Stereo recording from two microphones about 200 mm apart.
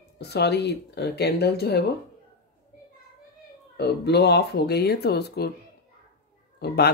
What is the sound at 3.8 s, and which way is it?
Speech, 55° left (ahead or behind).